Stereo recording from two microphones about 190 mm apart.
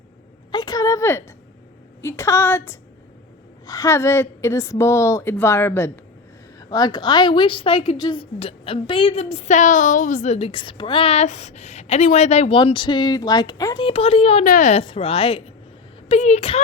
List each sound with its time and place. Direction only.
0.5 s a sound: 20° left (ahead or behind)
2.0 s a woman's voice: 15° left (ahead or behind); by 14.4 s 30° left (ahead or behind)
14.4 s a woman's voice: 45° left (ahead or behind)